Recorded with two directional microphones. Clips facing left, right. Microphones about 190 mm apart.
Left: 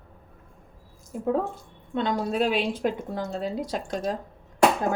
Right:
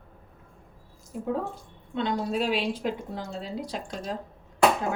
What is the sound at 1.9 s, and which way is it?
Speech, 50° left (ahead or behind).